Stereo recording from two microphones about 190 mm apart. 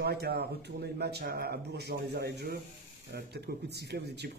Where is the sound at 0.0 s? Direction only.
55° right (ahead or behind).